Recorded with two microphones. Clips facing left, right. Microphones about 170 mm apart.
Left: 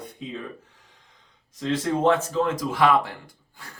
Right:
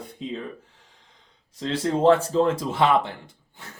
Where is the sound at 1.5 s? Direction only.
30° right (ahead or behind).